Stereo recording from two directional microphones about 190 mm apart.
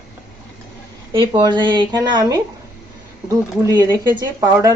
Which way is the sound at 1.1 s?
25° right (ahead or behind).